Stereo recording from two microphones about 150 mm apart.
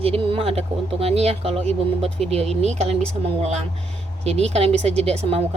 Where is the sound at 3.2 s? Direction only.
45° right (ahead or behind).